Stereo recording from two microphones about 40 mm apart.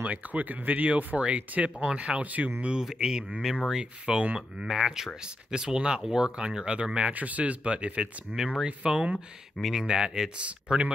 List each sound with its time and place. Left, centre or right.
0.0 s speech: right
2.8 s speech: centre
4.0 s speech: right
4.6 s speech: centre
8.9 s speech: centre
10.4 s speech: right